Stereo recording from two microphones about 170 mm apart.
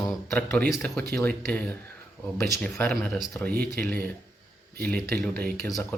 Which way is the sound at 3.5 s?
65° right (ahead or behind).